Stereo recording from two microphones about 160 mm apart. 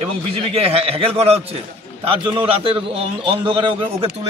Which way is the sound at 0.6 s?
35° right (ahead or behind).